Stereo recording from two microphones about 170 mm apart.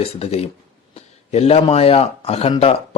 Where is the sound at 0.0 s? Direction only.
35° left (ahead or behind).